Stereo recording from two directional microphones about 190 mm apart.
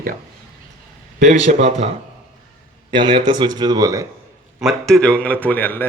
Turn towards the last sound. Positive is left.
turn(degrees=10)  # may be behind; listen again after turning